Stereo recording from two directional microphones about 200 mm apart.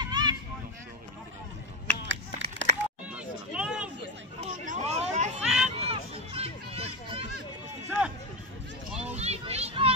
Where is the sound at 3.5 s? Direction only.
5° right (ahead or behind).